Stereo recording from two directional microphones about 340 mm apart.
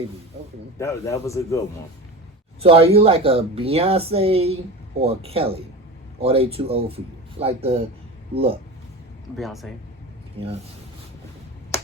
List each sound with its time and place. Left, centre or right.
0.8 s a man's voice: centre
2.6 s speech: centre
9.4 s speech: centre
10.4 s speech: centre
11.7 s finger snapping: centre